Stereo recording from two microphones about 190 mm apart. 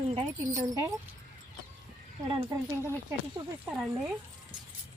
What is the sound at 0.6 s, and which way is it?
Speech, 20° right (ahead or behind).